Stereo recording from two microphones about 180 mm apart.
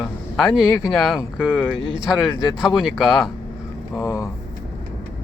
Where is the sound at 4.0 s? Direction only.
20° left (ahead or behind).